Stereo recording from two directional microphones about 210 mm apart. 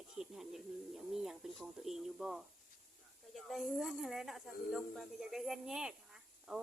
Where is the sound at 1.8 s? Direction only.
Centre (ahead or behind).